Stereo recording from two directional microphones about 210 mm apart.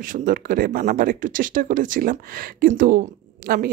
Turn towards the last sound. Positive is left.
turn(degrees=-45)  # may be behind; listen again after turning